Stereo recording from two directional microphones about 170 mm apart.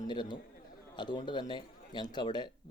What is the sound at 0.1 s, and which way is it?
A man's voice, 25° left (ahead or behind).